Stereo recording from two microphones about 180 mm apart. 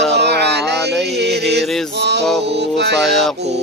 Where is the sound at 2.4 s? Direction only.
70° right (ahead or behind).